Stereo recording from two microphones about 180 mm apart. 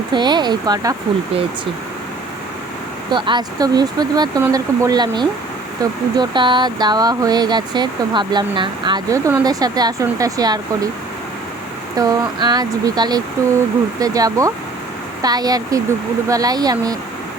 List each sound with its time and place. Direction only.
0.1 s speech: 25° right (ahead or behind)
3.1 s speech: 25° right (ahead or behind)
11.9 s speech: 20° right (ahead or behind)